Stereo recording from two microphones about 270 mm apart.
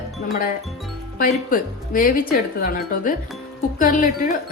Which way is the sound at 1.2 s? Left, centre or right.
Left.